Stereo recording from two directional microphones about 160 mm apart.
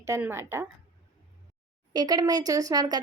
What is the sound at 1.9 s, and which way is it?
A woman's voice, 25° right (ahead or behind).